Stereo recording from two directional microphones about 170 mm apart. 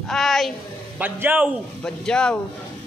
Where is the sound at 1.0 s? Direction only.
10° right (ahead or behind).